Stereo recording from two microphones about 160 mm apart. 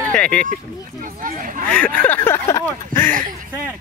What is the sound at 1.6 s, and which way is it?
Speech, 5° left (ahead or behind).